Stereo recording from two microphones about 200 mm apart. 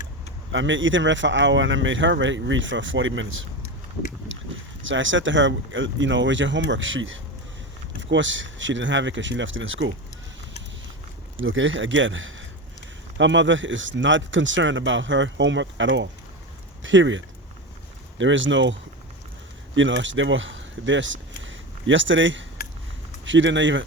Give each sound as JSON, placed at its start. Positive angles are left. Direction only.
{"t": 0.5, "sound": "speech", "side_deg": -70}
{"t": 4.3, "sound": "a sound", "side_deg": -75}
{"t": 4.9, "sound": "speech", "side_deg": -70}
{"t": 11.3, "sound": "speech", "side_deg": -75}